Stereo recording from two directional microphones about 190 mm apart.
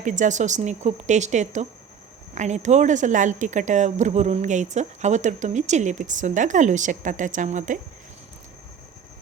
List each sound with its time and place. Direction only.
0.0 s speech: 40° right (ahead or behind)